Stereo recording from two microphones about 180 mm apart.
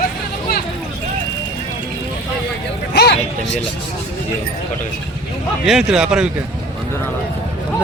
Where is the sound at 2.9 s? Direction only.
65° left (ahead or behind).